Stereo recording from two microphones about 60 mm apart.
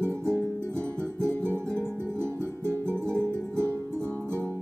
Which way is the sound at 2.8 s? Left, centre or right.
Right.